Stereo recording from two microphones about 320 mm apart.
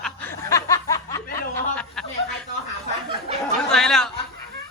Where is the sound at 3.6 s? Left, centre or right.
Centre.